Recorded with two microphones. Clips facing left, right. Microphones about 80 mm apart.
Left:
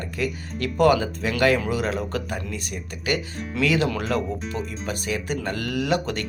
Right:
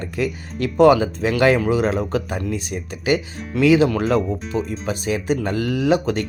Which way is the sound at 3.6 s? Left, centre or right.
Centre.